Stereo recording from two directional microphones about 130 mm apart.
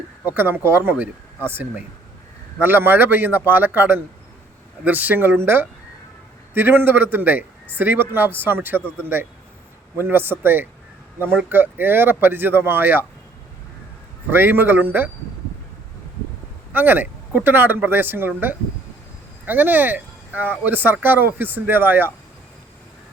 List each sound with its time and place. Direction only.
0.3 s a man's voice: 15° right (ahead or behind)
10.0 s a man's voice: 15° right (ahead or behind)
14.3 s a man's voice: 15° right (ahead or behind)
16.7 s a man's voice: 15° right (ahead or behind)